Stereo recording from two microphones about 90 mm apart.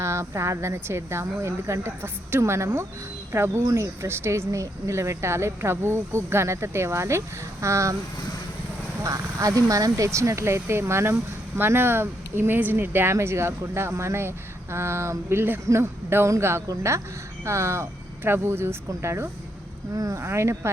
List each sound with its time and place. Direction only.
0.0 s speech: 30° right (ahead or behind)
9.0 s speech: 35° right (ahead or behind)